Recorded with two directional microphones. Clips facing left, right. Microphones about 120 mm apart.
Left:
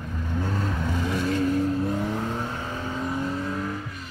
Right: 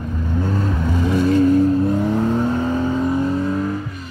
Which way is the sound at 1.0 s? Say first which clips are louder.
Right 10 dB; 30° right (ahead or behind).